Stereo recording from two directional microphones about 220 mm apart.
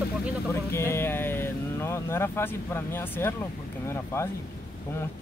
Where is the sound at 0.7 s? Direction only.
10° left (ahead or behind).